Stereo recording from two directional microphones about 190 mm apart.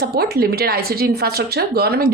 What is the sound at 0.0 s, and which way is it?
A woman's voice, 55° right (ahead or behind).